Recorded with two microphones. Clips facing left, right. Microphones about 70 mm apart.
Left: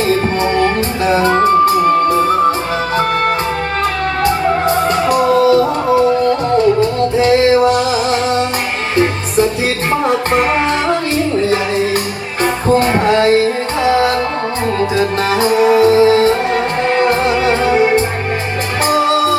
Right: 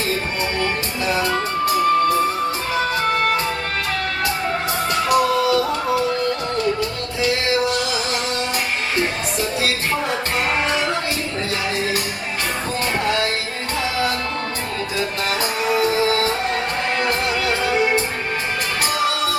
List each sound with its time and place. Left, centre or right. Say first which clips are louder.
1.0 s music: left 10 dB; left
4.2 s music: left 12 dB; left
10.3 s music: left 7 dB; left
12.4 s music: left 13 dB; left
17.0 s music: left 9 dB; left